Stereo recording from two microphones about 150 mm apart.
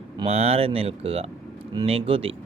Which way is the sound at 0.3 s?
40° right (ahead or behind).